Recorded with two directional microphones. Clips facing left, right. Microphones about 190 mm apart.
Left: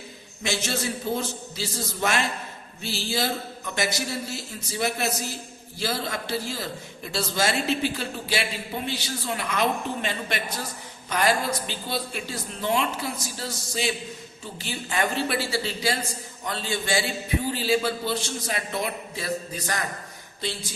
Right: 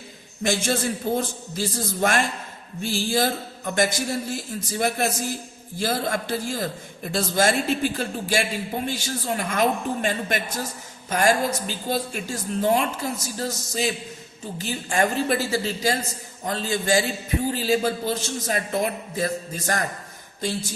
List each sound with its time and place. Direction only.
0.4 s a woman's voice: 50° right (ahead or behind)